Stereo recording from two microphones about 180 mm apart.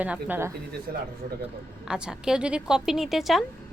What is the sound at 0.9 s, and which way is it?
Speech, 55° right (ahead or behind).